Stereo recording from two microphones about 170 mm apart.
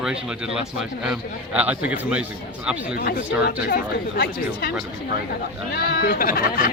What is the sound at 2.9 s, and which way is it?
Speech, 65° left (ahead or behind).